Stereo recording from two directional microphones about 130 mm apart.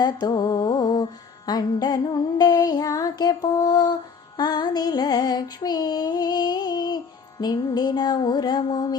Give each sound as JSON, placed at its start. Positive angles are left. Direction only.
{"t": 0.0, "sound": "mantra", "side_deg": 35}
{"t": 1.5, "sound": "female singing", "side_deg": 30}
{"t": 4.4, "sound": "music", "side_deg": 30}
{"t": 7.4, "sound": "female singing", "side_deg": 30}